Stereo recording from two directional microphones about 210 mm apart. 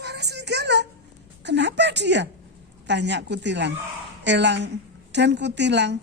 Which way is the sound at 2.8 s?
55° right (ahead or behind).